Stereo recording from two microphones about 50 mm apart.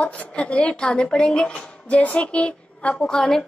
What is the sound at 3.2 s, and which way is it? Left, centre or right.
Child singing, centre.